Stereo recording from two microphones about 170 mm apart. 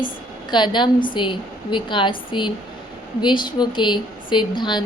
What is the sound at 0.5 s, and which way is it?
A woman's voice, 25° left (ahead or behind).